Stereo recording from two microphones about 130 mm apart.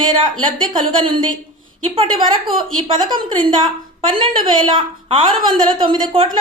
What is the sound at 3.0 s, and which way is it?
Speech, 35° right (ahead or behind).